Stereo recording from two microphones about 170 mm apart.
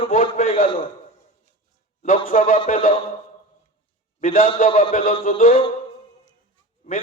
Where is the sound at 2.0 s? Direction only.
50° left (ahead or behind).